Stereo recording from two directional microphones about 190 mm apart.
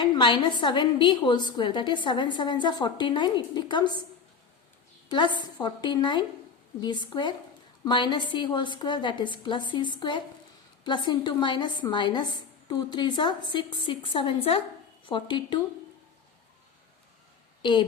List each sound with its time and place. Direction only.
0.0 s a woman's voice: 25° left (ahead or behind)
5.0 s a woman's voice: 25° left (ahead or behind)
17.6 s a woman's voice: 25° left (ahead or behind)